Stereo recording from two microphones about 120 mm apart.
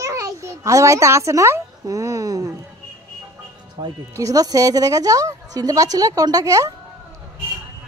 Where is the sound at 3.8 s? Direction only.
30° right (ahead or behind).